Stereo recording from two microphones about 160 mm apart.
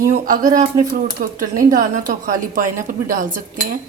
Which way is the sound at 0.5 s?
50° right (ahead or behind).